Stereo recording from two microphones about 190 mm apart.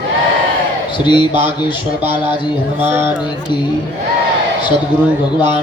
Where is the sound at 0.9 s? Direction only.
25° left (ahead or behind).